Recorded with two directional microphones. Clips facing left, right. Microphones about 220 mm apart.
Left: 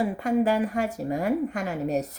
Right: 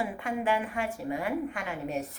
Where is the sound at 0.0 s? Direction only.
40° left (ahead or behind).